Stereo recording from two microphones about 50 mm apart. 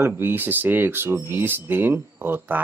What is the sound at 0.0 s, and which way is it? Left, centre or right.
Speech, right.